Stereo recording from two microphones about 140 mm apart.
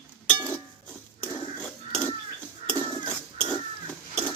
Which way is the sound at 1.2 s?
10° left (ahead or behind).